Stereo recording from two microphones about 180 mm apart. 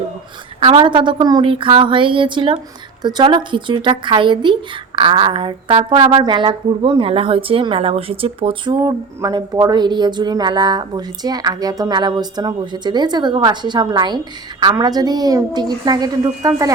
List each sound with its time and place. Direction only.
0.6 s a woman's voice: 30° right (ahead or behind)